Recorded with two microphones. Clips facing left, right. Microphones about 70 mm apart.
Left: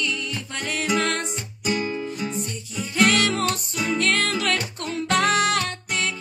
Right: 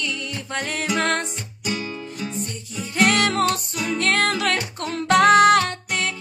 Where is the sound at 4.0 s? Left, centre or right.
Right.